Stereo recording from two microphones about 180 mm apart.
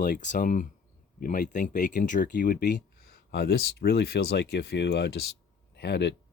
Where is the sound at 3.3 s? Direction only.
65° left (ahead or behind).